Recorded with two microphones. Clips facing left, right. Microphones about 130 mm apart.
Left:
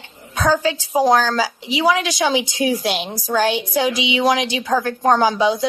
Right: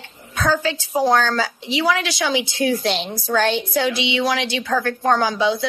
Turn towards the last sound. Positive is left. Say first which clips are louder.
# left 3 dB
turn(degrees=15)  # may be behind; listen again after turning